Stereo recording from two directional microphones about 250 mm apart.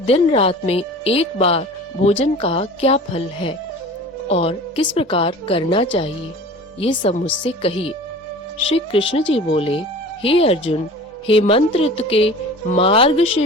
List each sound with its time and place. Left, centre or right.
0.0 s a woman's voice: left